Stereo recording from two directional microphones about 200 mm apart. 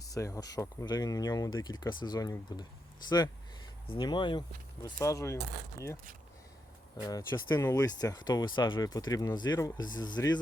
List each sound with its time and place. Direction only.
0.0 s speech: 15° left (ahead or behind)